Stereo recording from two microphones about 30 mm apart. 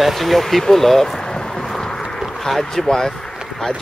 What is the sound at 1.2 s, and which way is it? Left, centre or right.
Vehicle, left.